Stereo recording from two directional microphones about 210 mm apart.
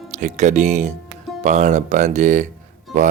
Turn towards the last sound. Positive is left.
turn(degrees=0)  # may be behind; listen again after turning